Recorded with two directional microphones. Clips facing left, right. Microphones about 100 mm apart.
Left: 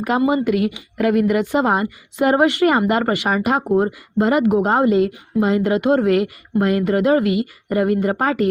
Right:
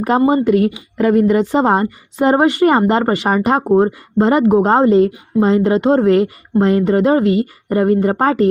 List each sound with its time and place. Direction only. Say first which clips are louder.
0.0 s speech: right 4 dB; 35° right (ahead or behind)